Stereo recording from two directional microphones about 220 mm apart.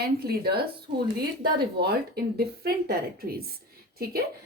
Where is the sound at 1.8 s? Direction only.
45° right (ahead or behind).